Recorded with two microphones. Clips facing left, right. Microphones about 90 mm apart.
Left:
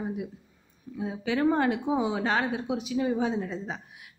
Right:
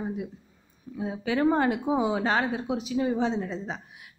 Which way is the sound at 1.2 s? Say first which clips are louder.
Right 1 dB; 5° right (ahead or behind).